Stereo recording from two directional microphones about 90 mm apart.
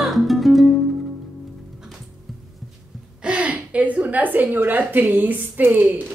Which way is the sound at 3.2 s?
10° right (ahead or behind).